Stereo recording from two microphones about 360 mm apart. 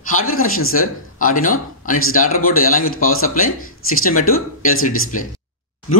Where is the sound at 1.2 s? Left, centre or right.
Left.